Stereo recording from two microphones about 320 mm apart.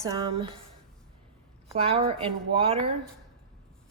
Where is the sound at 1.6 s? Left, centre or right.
Centre.